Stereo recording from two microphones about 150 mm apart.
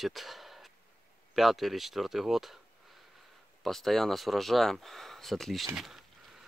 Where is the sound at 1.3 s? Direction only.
Centre (ahead or behind).